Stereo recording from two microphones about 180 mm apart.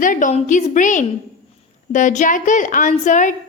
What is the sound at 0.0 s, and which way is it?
A woman's voice, 45° left (ahead or behind).